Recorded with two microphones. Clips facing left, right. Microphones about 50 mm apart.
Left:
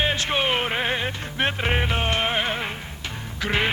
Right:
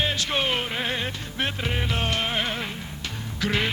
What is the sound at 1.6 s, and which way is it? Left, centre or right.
Music, left.